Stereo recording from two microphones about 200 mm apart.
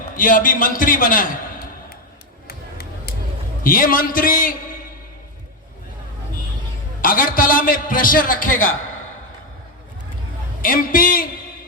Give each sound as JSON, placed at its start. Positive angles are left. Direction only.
{"t": 0.2, "sound": "a man's voice", "side_deg": 45}
{"t": 2.5, "sound": "a sound", "side_deg": 50}
{"t": 3.6, "sound": "a man's voice", "side_deg": 45}
{"t": 7.0, "sound": "a man's voice", "side_deg": 45}
{"t": 10.6, "sound": "a man's voice", "side_deg": 45}